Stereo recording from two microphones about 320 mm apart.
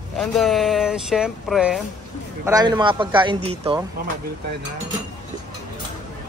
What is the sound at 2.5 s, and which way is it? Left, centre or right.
Speech, centre.